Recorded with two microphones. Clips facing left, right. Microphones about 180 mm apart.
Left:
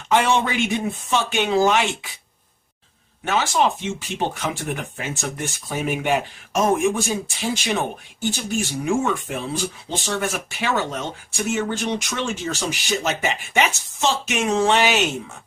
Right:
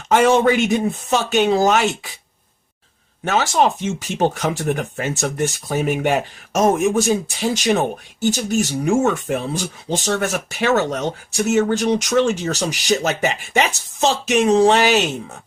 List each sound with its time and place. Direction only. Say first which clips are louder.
0.1 s speech: right 6 dB; 45° right (ahead or behind)
3.2 s speech: right 3 dB; 40° right (ahead or behind)